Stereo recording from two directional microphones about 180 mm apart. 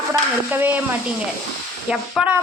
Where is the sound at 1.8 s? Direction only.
5° right (ahead or behind).